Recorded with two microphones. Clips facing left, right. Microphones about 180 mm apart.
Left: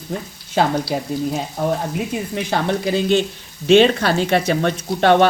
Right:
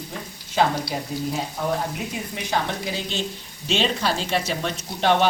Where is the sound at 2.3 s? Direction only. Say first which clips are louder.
Left 5 dB; 55° left (ahead or behind).